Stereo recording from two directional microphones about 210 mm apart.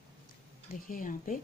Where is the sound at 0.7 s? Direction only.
40° left (ahead or behind).